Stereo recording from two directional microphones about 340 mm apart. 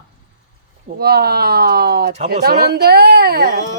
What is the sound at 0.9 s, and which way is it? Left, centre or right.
Speech, right.